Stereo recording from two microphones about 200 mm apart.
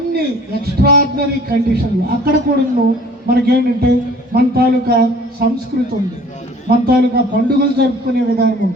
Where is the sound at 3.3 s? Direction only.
50° right (ahead or behind).